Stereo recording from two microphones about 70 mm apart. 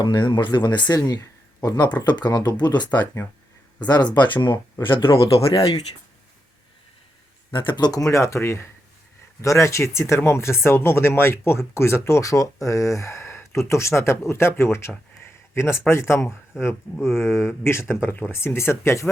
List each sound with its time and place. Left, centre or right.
0.0 s speech: left
0.9 s speech: left
4.5 s speech: left
7.7 s speech: left
8.1 s speech: left